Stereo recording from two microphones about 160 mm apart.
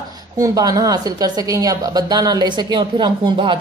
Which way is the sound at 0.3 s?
20° right (ahead or behind).